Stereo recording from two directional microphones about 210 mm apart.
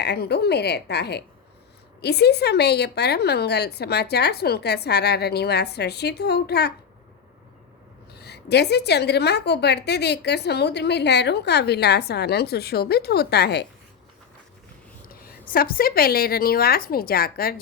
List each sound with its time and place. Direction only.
0.0 s a woman's voice: 50° left (ahead or behind)
8.1 s a woman's voice: 50° left (ahead or behind)
15.0 s a woman's voice: 45° left (ahead or behind)